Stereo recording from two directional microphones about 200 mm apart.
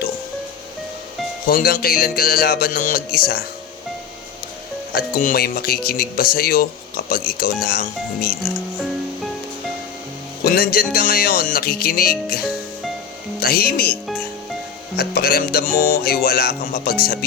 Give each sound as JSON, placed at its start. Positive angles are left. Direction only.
{"t": 1.5, "sound": "speech", "side_deg": 45}
{"t": 4.9, "sound": "speech", "side_deg": 45}
{"t": 10.4, "sound": "speech", "side_deg": 50}
{"t": 12.4, "sound": "music", "side_deg": -5}
{"t": 13.4, "sound": "speech", "side_deg": 50}
{"t": 14.9, "sound": "speech", "side_deg": 50}